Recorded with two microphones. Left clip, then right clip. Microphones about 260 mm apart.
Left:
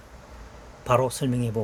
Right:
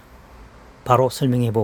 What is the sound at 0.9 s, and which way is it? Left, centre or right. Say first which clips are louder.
Speech: right 5 dB; right.